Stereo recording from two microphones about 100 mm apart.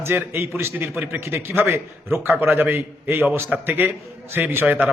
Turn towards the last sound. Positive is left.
turn(degrees=-15)  # may be behind; listen again after turning